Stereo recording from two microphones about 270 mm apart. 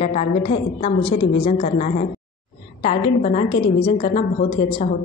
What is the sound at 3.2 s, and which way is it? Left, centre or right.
A woman's voice, left.